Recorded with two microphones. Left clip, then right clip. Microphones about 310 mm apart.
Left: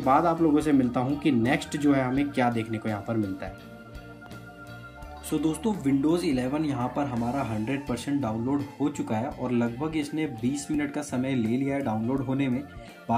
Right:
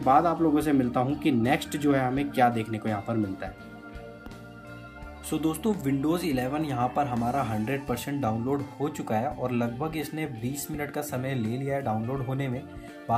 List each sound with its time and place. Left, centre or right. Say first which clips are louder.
0.0 s speech: even; centre
5.3 s speech: even; centre